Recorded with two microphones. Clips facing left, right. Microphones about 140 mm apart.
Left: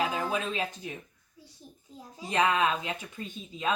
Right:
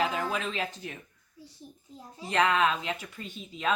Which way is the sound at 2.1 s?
15° left (ahead or behind).